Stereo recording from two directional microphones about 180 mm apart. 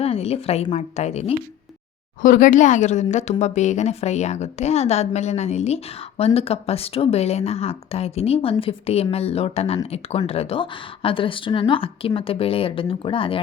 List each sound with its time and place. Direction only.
0.0 s a woman's voice: 35° left (ahead or behind)
2.2 s a woman's voice: 50° left (ahead or behind); by 13.4 s 30° left (ahead or behind)